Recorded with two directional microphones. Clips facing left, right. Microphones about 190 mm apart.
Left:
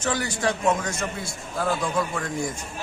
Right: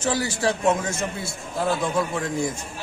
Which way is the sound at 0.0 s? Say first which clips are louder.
Right 2 dB; 30° right (ahead or behind).